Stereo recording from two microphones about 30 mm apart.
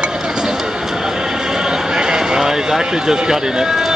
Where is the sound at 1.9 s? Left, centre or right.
Right.